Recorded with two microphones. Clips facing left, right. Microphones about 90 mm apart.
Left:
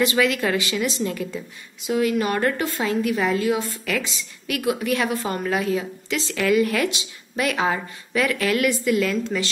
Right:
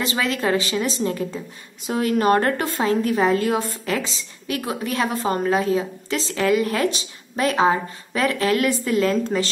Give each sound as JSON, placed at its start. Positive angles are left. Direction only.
{"t": 0.0, "sound": "a woman's voice", "side_deg": -30}
{"t": 1.9, "sound": "a woman's voice", "side_deg": -40}
{"t": 3.8, "sound": "a woman's voice", "side_deg": -30}